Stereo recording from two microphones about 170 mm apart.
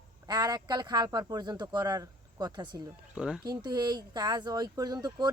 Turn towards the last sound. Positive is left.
turn(degrees=-25)  # may be behind; listen again after turning